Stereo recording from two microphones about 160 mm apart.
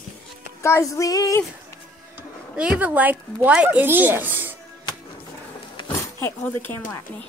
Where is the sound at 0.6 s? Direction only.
15° left (ahead or behind).